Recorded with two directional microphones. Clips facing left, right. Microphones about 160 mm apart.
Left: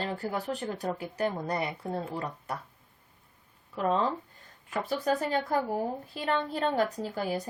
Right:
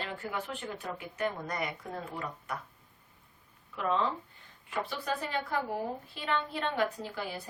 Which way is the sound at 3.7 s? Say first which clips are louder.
Left 3 dB; 40° left (ahead or behind).